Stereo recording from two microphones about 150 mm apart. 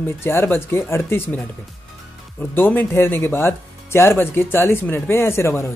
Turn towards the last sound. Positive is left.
turn(degrees=15)  # may be behind; listen again after turning